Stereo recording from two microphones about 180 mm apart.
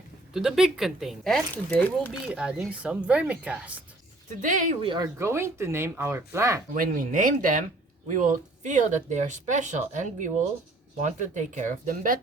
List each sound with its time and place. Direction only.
0.3 s speech: centre (ahead or behind)
2.3 s speech: 5° right (ahead or behind)
4.3 s speech: 45° right (ahead or behind)
4.8 s speech: 30° right (ahead or behind)
5.1 s speech: 15° right (ahead or behind)
6.7 s speech: 50° right (ahead or behind)